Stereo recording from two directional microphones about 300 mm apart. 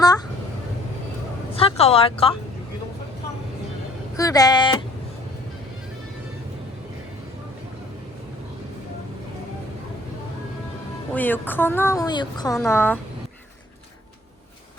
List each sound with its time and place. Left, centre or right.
1.5 s speech: centre
4.2 s speech: centre
11.1 s speech: centre